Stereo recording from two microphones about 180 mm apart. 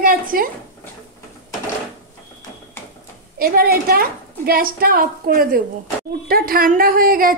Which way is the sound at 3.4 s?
55° right (ahead or behind).